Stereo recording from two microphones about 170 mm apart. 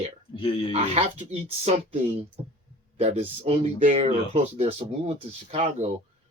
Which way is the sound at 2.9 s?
40° right (ahead or behind).